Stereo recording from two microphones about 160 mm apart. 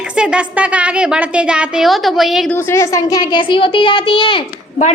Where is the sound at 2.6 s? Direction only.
15° left (ahead or behind); by 4.4 s 30° left (ahead or behind).